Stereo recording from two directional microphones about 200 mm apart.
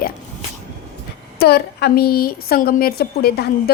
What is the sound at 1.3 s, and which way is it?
A woman's voice, 50° left (ahead or behind).